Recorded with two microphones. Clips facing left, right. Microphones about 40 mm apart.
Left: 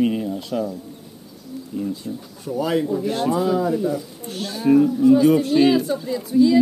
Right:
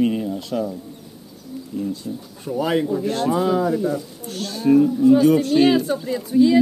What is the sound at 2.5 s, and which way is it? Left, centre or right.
Speech, right.